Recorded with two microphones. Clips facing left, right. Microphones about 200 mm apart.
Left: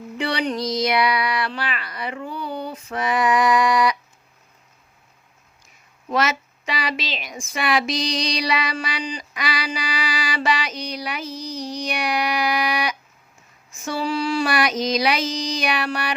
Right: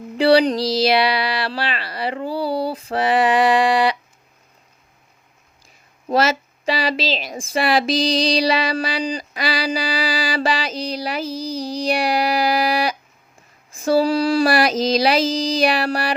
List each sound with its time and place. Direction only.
0.2 s a woman's voice: 35° right (ahead or behind)
6.1 s a woman's voice: 30° right (ahead or behind)